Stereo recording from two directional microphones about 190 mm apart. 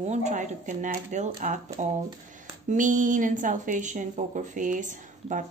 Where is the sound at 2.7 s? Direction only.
45° right (ahead or behind).